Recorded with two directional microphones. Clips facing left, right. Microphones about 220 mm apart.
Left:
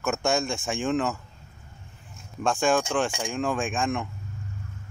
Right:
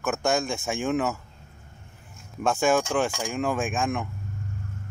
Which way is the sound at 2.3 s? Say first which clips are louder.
Right 1 dB; 5° right (ahead or behind).